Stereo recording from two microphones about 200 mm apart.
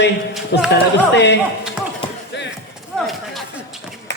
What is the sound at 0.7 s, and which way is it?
Speech, 60° left (ahead or behind).